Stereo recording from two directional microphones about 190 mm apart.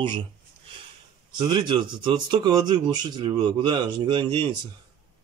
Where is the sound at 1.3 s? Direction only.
25° right (ahead or behind).